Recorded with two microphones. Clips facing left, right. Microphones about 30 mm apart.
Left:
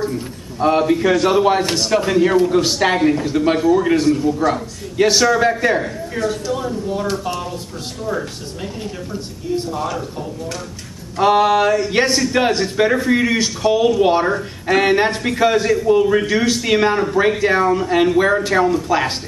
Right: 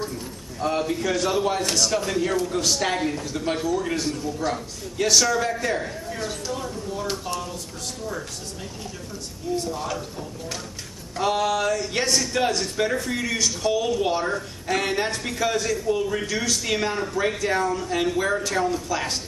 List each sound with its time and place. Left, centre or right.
0.6 s speech: left
9.1 s speech: left
11.1 s speech: left